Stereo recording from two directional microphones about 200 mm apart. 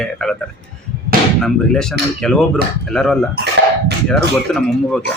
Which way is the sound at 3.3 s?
55° right (ahead or behind).